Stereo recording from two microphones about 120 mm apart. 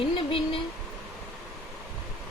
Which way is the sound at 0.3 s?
50° left (ahead or behind).